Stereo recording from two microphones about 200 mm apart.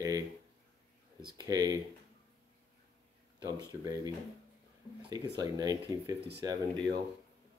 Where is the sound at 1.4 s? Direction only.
20° right (ahead or behind).